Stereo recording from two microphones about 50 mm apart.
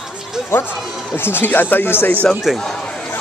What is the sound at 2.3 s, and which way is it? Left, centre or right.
Speech, centre.